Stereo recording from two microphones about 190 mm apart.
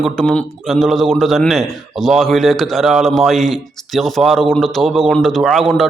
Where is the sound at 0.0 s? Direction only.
5° left (ahead or behind).